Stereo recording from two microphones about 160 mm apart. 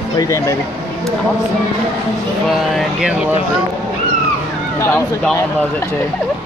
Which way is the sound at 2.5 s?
5° right (ahead or behind).